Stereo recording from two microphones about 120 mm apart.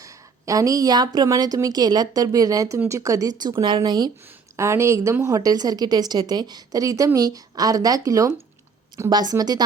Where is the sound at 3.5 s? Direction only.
40° right (ahead or behind).